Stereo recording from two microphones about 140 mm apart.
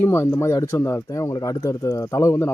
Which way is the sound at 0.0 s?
15° left (ahead or behind).